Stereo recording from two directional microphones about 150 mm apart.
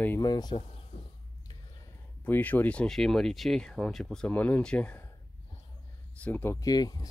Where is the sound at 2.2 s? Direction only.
10° left (ahead or behind).